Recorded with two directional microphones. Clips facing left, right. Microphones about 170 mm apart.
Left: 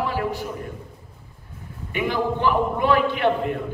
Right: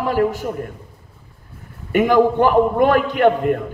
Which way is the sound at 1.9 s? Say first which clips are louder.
Right 9 dB; 45° right (ahead or behind).